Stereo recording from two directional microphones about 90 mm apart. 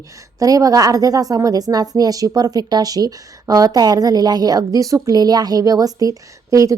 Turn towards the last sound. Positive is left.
turn(degrees=-40)  # may be behind; listen again after turning